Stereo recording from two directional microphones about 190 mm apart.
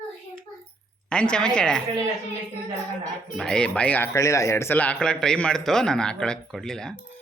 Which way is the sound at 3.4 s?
5° left (ahead or behind).